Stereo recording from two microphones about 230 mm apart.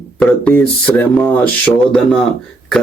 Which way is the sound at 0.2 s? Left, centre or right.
Centre.